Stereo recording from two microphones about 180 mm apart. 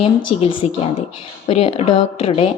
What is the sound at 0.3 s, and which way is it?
A woman's voice, 30° left (ahead or behind).